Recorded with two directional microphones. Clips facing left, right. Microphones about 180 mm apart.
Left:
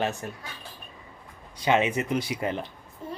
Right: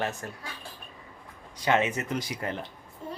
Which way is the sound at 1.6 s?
15° left (ahead or behind).